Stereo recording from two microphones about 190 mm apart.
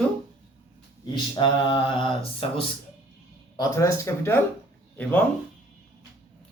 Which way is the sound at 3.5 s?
15° left (ahead or behind).